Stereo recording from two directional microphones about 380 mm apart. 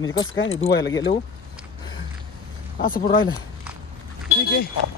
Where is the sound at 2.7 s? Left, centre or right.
Left.